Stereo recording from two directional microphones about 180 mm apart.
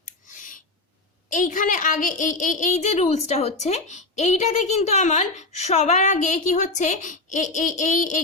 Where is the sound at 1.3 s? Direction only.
45° left (ahead or behind).